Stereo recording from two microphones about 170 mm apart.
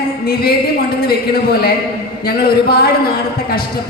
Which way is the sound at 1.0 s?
65° left (ahead or behind).